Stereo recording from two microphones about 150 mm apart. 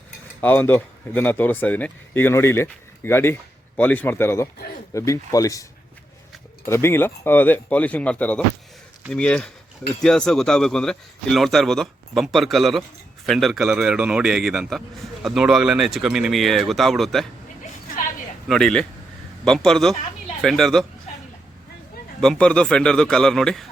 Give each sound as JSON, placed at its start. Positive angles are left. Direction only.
{"t": 0.4, "sound": "speech", "side_deg": 10}
{"t": 6.7, "sound": "a man's voice", "side_deg": 15}
{"t": 18.4, "sound": "a man's voice", "side_deg": 0}
{"t": 22.2, "sound": "a man's voice", "side_deg": 5}